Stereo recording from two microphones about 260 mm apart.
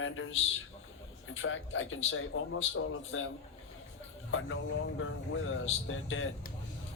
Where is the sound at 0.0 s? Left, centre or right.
Left.